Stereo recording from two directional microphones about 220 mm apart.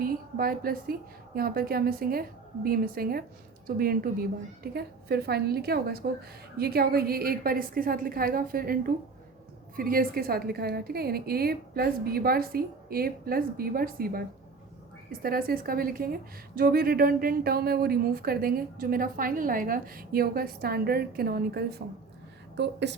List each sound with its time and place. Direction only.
0.0 s a woman's voice: 40° right (ahead or behind)